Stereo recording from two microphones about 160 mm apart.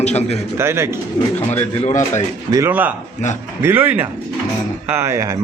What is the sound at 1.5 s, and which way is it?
Speech, 45° left (ahead or behind).